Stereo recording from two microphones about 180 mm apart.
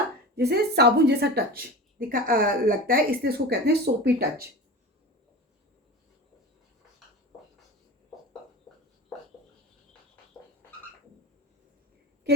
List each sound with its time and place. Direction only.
0.3 s a woman's voice: 65° right (ahead or behind)